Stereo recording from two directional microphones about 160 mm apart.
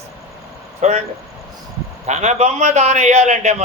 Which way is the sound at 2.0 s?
45° right (ahead or behind).